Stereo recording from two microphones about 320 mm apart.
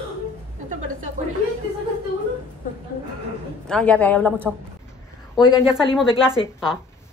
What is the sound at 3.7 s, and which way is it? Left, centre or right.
Speech, centre.